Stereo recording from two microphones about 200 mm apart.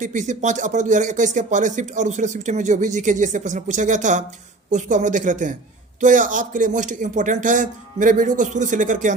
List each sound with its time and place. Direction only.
0.0 s speech: 40° right (ahead or behind)